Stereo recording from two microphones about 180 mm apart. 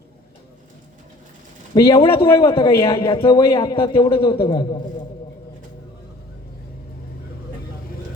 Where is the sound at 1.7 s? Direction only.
25° left (ahead or behind).